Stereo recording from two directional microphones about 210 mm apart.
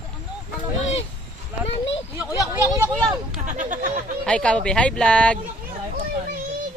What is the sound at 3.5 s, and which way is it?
Speech, 35° right (ahead or behind).